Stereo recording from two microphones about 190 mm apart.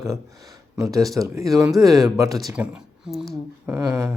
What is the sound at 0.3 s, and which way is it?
Speech, 20° right (ahead or behind).